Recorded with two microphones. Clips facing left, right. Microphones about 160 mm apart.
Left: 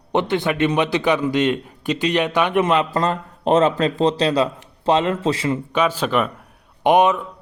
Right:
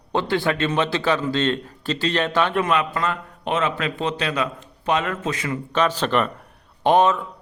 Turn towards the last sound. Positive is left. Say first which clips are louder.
# left 2 dB
turn(degrees=15)  # may be behind; listen again after turning